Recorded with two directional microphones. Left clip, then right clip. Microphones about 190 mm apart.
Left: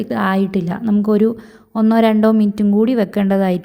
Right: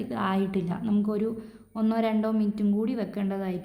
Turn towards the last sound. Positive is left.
turn(degrees=45)  # may be behind; listen again after turning